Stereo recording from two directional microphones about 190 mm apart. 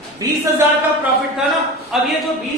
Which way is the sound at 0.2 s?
20° right (ahead or behind).